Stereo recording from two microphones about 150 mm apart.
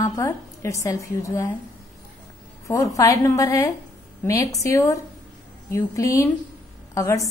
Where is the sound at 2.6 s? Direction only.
20° left (ahead or behind).